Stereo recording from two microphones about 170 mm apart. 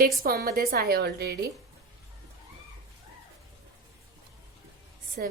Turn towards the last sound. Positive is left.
turn(degrees=-55)  # may be behind; listen again after turning